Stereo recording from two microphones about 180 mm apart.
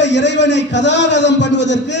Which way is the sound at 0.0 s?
75° left (ahead or behind).